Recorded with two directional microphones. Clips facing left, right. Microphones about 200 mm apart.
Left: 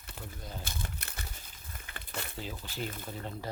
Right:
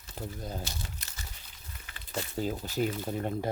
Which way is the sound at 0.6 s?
55° left (ahead or behind).